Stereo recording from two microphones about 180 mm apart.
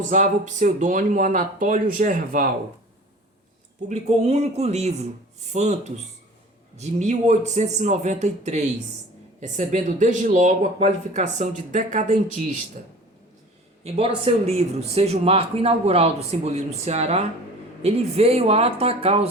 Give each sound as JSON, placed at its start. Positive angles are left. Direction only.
{"t": 0.1, "sound": "speech", "side_deg": -40}
{"t": 3.8, "sound": "speech", "side_deg": -40}
{"t": 6.7, "sound": "speech", "side_deg": -40}
{"t": 13.8, "sound": "speech", "side_deg": -35}